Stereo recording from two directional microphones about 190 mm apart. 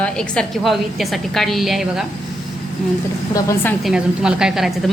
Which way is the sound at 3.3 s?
15° left (ahead or behind).